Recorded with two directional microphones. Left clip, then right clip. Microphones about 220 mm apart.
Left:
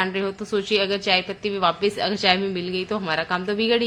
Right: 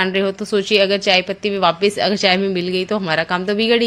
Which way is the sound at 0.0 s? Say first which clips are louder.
Right 6 dB; 30° right (ahead or behind).